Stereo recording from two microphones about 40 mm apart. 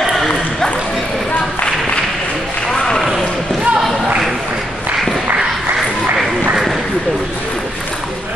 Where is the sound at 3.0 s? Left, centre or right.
Centre.